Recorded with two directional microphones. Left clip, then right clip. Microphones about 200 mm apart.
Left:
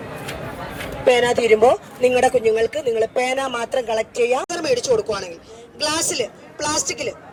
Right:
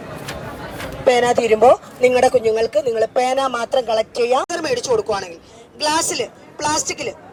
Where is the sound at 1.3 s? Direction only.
30° right (ahead or behind).